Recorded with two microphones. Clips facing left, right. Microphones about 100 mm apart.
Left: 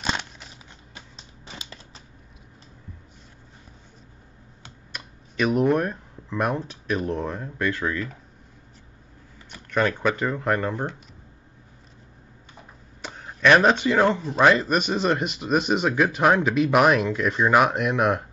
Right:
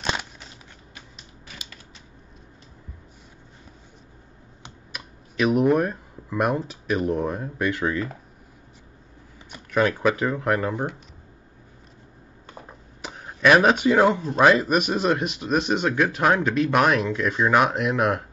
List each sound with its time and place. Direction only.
0.0 s crumpling: centre (ahead or behind)
0.9 s a sound: 30° left (ahead or behind)
4.9 s speech: centre (ahead or behind); by 8.1 s 15° right (ahead or behind)
9.7 s speech: 5° right (ahead or behind)
13.0 s speech: 10° right (ahead or behind)